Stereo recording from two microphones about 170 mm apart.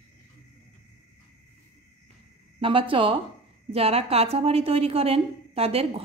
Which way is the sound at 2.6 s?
30° right (ahead or behind).